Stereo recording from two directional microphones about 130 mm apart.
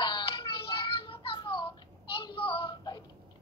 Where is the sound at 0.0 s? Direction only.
35° left (ahead or behind).